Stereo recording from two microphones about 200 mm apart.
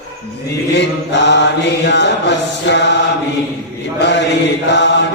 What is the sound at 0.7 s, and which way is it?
Mantra, 60° left (ahead or behind).